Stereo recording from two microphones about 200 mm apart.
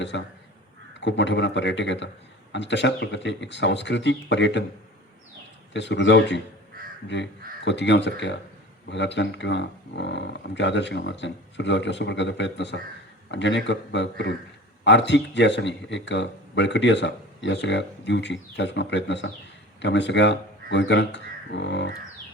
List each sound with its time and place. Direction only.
0.9 s speech: 65° left (ahead or behind)
5.7 s speech: 60° left (ahead or behind)
6.8 s crow: 45° right (ahead or behind)
7.1 s speech: 60° left (ahead or behind)